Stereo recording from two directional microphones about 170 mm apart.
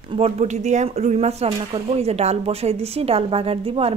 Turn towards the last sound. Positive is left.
turn(degrees=-35)  # may be behind; listen again after turning